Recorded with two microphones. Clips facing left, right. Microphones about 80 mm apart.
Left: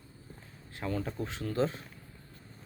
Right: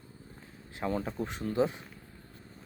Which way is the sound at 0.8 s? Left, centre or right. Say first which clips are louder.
Right 2 dB; right.